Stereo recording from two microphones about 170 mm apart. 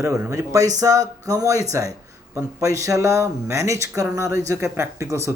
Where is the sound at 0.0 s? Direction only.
15° right (ahead or behind).